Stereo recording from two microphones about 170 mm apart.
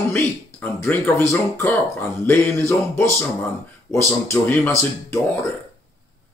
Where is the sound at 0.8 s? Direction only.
10° left (ahead or behind).